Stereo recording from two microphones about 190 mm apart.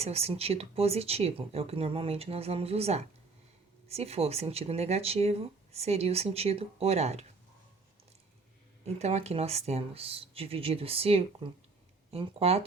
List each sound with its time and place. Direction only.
0.0 s speech: 35° right (ahead or behind)
8.8 s speech: 35° right (ahead or behind)